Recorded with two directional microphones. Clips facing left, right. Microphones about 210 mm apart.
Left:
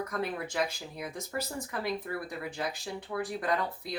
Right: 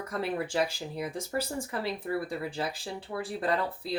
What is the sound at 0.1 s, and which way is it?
Speech, 30° right (ahead or behind).